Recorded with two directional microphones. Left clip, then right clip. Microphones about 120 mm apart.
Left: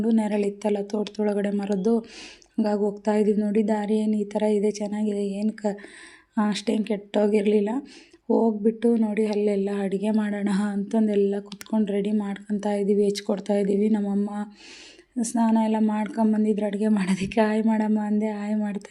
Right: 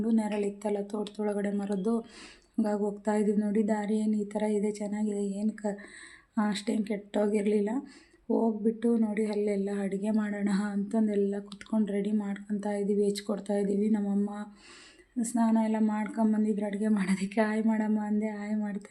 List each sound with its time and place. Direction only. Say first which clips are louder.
0.0 s a woman's voice: left 6 dB; 30° left (ahead or behind)